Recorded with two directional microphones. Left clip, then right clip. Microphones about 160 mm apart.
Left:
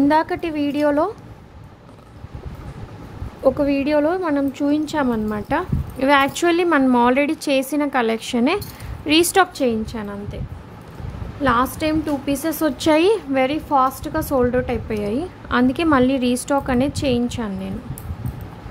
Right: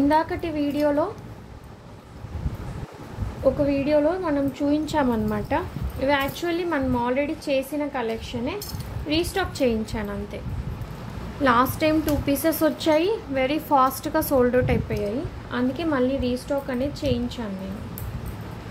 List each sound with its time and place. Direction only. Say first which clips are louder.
0.1 s a woman's voice: left 4 dB; 35° left (ahead or behind)
3.4 s a woman's voice: left 4 dB; 50° left (ahead or behind)
4.8 s a woman's voice: left 2 dB; 20° left (ahead or behind)
5.9 s a woman's voice: left 7 dB; 35° left (ahead or behind)
9.6 s a woman's voice: left 2 dB; 15° left (ahead or behind)
11.4 s a woman's voice: left 1 dB; 10° left (ahead or behind)
12.7 s a woman's voice: left 5 dB; 30° left (ahead or behind)
13.5 s a woman's voice: right 2 dB; 10° left (ahead or behind)
15.5 s a woman's voice: left 8 dB; 35° left (ahead or behind)